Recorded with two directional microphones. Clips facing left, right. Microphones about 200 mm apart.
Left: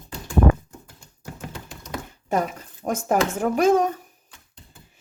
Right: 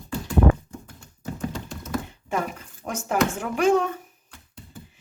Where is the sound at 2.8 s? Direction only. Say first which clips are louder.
Left 2 dB; 40° left (ahead or behind).